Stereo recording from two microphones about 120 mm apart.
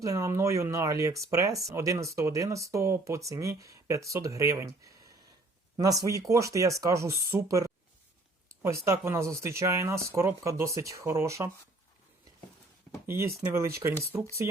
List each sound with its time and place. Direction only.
0.0 s speech: 25° right (ahead or behind)
5.7 s speech: 30° right (ahead or behind)
13.1 s speech: 20° right (ahead or behind)